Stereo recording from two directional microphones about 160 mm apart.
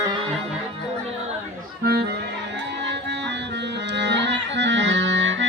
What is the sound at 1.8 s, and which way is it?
Music, 85° right.